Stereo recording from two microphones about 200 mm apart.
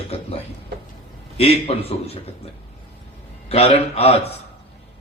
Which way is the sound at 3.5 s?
30° left (ahead or behind).